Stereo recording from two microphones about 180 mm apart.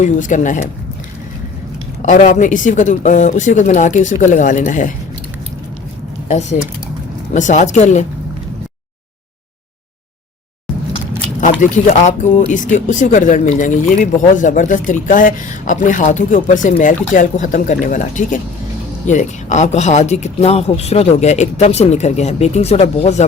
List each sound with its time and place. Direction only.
0.0 s speech: 45° left (ahead or behind)
2.0 s speech: 45° left (ahead or behind)
6.2 s speech: 40° left (ahead or behind)
11.6 s speech: 45° left (ahead or behind)